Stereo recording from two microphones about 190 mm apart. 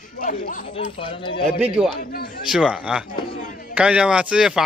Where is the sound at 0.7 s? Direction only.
30° left (ahead or behind).